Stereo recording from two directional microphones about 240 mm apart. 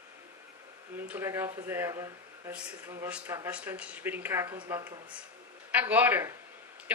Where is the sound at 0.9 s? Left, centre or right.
Centre.